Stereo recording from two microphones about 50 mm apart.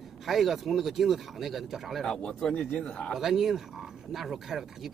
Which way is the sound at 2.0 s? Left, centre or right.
Centre.